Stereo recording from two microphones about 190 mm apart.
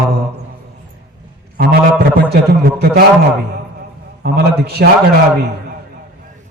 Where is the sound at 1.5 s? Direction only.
55° right (ahead or behind).